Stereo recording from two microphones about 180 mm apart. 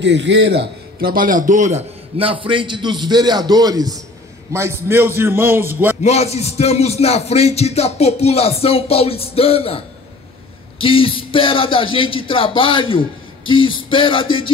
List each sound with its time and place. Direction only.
0.0 s a man's voice: 80° right; by 5.9 s 10° right (ahead or behind)
6.0 s a man's voice: 35° left (ahead or behind)
10.8 s speech: 30° left (ahead or behind)